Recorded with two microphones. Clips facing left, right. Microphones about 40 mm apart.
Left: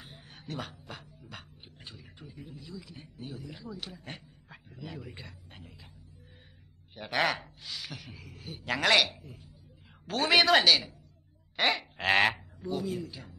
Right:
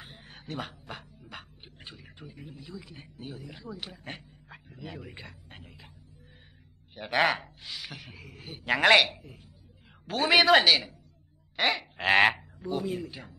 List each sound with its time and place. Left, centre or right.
0.0 s speech: right
4.5 s a sound: centre
6.9 s a man's voice: centre
9.8 s speech: centre
11.5 s frog: centre
12.4 s speech: right